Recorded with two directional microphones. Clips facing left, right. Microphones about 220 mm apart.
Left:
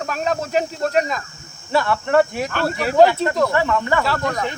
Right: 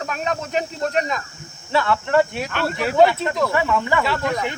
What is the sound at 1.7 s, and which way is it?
Speech, 5° left (ahead or behind).